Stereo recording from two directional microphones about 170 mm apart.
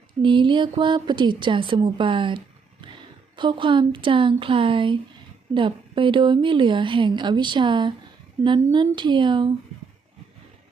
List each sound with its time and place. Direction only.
0.2 s a woman's voice: 30° right (ahead or behind)